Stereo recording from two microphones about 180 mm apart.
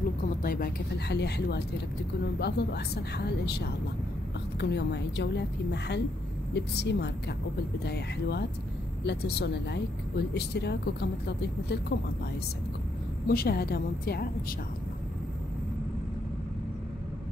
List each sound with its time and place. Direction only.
0.4 s a woman's voice: 55° left (ahead or behind)
13.3 s speech: 55° left (ahead or behind)